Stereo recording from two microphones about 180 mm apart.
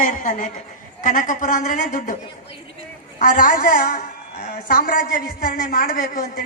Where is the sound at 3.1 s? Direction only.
50° left (ahead or behind).